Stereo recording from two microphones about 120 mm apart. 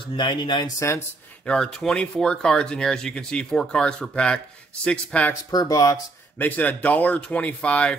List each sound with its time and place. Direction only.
0.1 s speech: 40° left (ahead or behind)
0.7 s speech: 25° left (ahead or behind)
1.4 s speech: 5° left (ahead or behind)
5.3 s speech: 30° left (ahead or behind)
6.3 s speech: 15° left (ahead or behind)